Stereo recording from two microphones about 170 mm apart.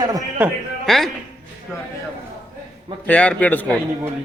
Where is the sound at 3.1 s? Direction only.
10° left (ahead or behind).